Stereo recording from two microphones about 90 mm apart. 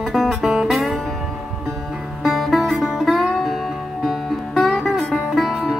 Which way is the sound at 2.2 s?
Centre (ahead or behind).